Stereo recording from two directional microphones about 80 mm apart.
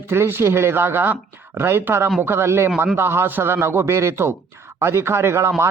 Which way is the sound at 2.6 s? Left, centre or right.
Right.